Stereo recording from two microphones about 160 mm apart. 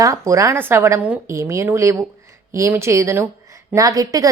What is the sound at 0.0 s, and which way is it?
A woman's voice, 20° right (ahead or behind).